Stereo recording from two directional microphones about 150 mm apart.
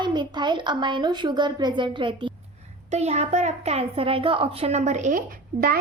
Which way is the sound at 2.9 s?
45° right (ahead or behind).